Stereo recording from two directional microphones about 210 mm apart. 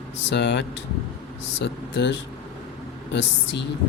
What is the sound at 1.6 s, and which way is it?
Speech, 55° left (ahead or behind).